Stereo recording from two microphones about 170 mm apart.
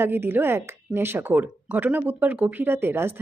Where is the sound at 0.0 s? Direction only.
15° right (ahead or behind).